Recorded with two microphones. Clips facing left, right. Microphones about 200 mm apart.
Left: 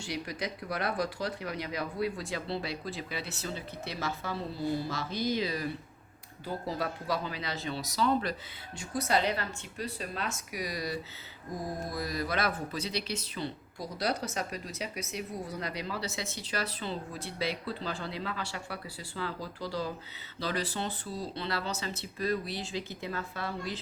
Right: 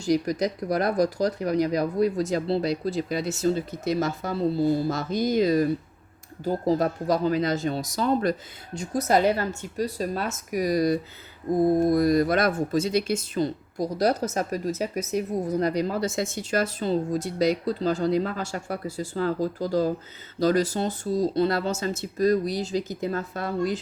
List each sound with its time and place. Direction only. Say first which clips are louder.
0.0 s speech: right 13 dB; 40° right (ahead or behind)